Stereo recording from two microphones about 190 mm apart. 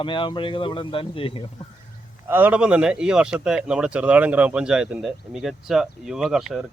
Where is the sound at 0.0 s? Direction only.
25° left (ahead or behind).